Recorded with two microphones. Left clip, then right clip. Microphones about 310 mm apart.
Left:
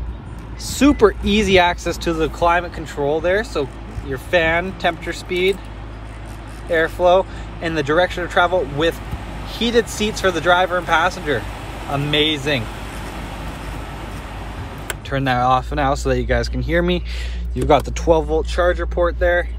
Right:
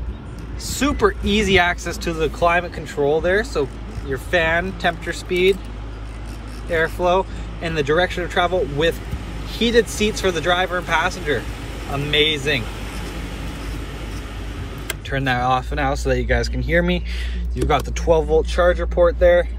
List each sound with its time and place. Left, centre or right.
0.7 s speech: centre
6.7 s speech: centre
15.0 s speech: centre